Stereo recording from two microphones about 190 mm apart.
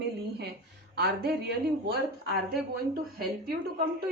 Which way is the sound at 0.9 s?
55° right (ahead or behind).